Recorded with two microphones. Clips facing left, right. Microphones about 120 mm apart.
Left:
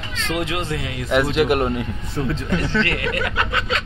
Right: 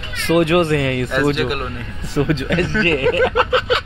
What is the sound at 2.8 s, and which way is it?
Speech, 35° right (ahead or behind).